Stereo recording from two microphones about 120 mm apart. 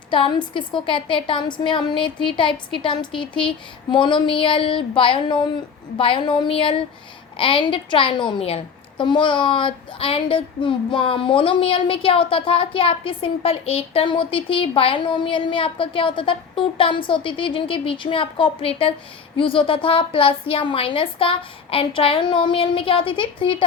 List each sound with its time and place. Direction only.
0.1 s a woman's voice: 40° left (ahead or behind)
3.1 s speech: 5° left (ahead or behind)
3.9 s a woman's voice: 40° left (ahead or behind)